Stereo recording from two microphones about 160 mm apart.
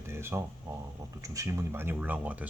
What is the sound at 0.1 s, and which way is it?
Speech, 15° right (ahead or behind).